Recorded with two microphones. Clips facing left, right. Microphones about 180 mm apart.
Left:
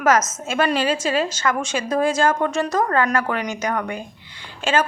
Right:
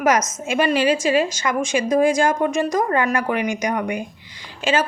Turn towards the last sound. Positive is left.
turn(degrees=-10)  # may be behind; listen again after turning